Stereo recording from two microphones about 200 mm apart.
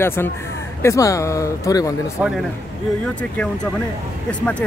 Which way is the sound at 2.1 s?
5° right (ahead or behind).